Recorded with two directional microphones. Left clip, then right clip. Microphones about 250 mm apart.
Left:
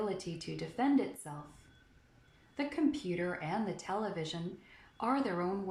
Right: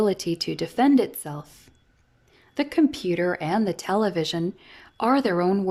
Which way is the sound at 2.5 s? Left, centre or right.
Right.